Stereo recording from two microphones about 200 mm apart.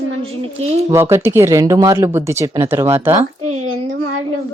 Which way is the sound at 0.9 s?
15° right (ahead or behind).